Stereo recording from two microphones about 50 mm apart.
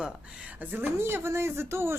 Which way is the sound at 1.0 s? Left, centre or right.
Right.